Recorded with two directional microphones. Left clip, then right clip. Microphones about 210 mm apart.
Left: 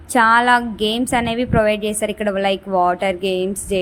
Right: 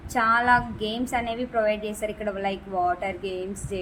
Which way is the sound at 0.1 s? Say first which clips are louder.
Left 7 dB; 45° left (ahead or behind).